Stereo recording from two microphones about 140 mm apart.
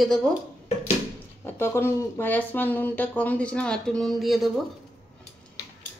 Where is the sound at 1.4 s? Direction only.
15° left (ahead or behind); by 4.5 s centre (ahead or behind).